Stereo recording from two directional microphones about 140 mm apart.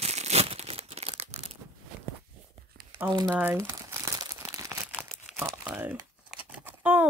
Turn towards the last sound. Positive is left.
turn(degrees=-10)  # may be behind; listen again after turning